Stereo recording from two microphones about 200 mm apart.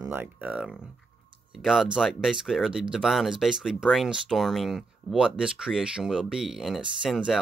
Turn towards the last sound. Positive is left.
turn(degrees=0)  # may be behind; listen again after turning